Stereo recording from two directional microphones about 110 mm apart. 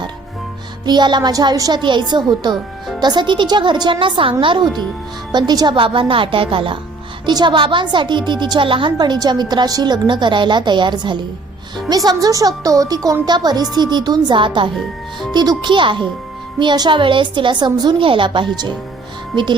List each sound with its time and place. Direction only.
0.9 s a woman's voice: 40° right (ahead or behind)